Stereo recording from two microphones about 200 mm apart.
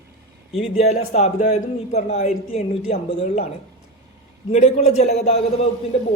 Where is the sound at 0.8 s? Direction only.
35° left (ahead or behind).